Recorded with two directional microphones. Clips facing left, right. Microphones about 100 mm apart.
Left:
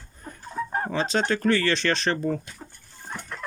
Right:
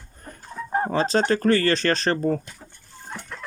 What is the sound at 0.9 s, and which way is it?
Speech, 40° right (ahead or behind).